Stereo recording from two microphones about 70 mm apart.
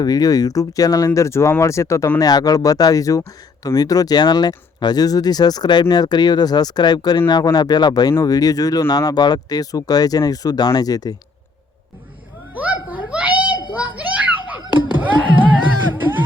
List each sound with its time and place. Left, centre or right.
0.0 s speech: left
2.1 s speech: left
8.2 s speech: left
12.5 s children playing: right
14.8 s music: right